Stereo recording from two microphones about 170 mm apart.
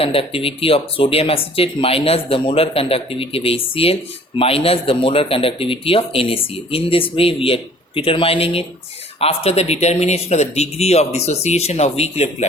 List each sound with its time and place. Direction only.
0.0 s speech: 35° left (ahead or behind)